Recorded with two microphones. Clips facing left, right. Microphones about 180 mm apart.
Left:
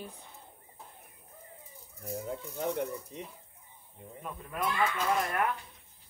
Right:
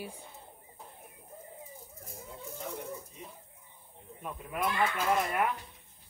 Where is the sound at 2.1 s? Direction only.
65° left (ahead or behind).